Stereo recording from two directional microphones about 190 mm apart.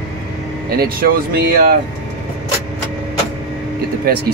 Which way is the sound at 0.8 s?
55° right (ahead or behind).